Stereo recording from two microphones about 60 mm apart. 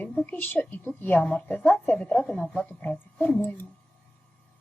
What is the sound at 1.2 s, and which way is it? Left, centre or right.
Speech, centre.